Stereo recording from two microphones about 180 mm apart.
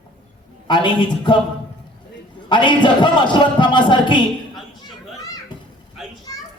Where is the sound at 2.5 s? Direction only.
25° left (ahead or behind).